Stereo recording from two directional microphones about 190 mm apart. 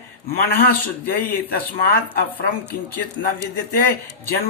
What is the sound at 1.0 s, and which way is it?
Speech, 50° left (ahead or behind).